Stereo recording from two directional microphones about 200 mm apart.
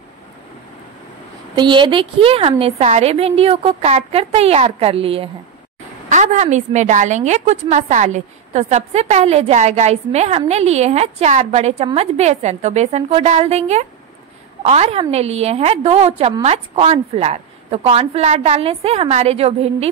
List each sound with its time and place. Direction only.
1.5 s a woman's voice: 25° right (ahead or behind)